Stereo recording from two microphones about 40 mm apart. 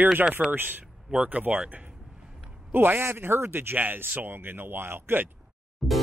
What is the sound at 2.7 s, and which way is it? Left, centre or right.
Speech, right.